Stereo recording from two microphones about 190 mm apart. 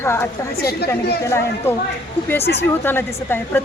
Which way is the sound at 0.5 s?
55° left (ahead or behind).